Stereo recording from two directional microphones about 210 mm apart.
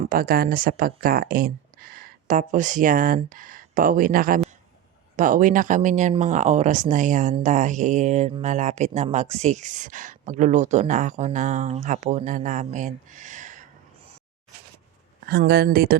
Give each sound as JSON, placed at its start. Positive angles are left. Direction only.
{"t": 0.0, "sound": "speech", "side_deg": -45}
{"t": 15.3, "sound": "speech", "side_deg": -50}